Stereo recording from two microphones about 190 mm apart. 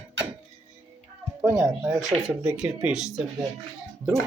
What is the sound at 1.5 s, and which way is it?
Speech, centre (ahead or behind).